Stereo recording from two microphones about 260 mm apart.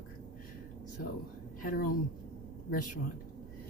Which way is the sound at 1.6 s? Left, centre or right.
Left.